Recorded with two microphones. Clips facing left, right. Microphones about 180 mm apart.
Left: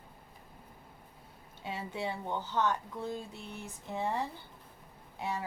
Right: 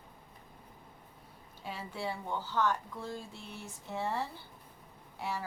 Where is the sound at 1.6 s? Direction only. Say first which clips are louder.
Left 2 dB; 20° left (ahead or behind).